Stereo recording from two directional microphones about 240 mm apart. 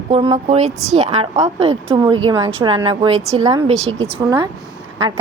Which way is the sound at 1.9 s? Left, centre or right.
Centre.